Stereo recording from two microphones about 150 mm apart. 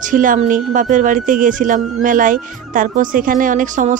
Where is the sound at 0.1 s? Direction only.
60° right (ahead or behind).